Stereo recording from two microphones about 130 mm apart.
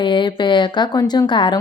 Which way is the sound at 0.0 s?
35° left (ahead or behind).